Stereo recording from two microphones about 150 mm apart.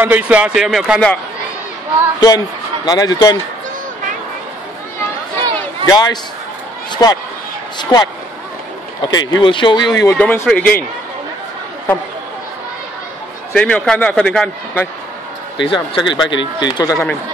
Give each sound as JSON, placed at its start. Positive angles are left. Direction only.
{"t": 0.0, "sound": "speech", "side_deg": -10}
{"t": 2.1, "sound": "a man's voice", "side_deg": 25}
{"t": 5.4, "sound": "a sound", "side_deg": -30}
{"t": 5.9, "sound": "a man's voice", "side_deg": 25}
{"t": 10.1, "sound": "a man's voice", "side_deg": 10}
{"t": 13.5, "sound": "a man's voice", "side_deg": 5}
{"t": 15.5, "sound": "a man's voice", "side_deg": 35}